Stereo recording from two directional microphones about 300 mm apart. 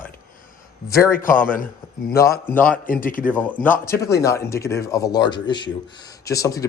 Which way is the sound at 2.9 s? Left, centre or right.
Left.